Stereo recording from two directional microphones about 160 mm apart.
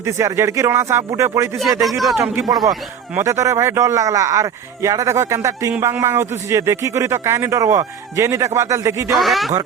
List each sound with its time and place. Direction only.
0.0 s a man's voice: 15° right (ahead or behind)
1.8 s speech: centre (ahead or behind)
2.3 s a man's voice: 20° right (ahead or behind)
9.1 s speech: centre (ahead or behind)